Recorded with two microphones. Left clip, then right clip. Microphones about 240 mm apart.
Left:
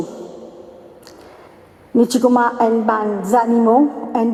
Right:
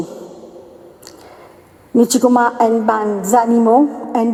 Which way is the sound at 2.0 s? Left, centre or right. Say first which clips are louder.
Right 2 dB; right.